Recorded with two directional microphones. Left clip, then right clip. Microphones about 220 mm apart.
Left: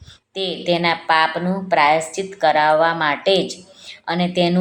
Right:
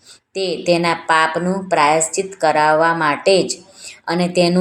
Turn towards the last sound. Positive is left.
turn(degrees=-30)  # may be behind; listen again after turning